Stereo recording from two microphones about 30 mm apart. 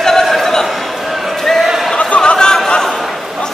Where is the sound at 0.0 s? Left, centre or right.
Centre.